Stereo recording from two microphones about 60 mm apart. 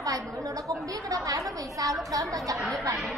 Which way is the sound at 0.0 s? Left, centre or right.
Right.